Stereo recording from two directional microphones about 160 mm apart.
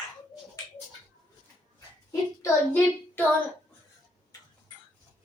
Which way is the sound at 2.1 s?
15° left (ahead or behind).